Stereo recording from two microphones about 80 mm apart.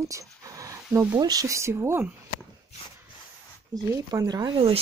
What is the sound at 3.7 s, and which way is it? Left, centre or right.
Speech, right.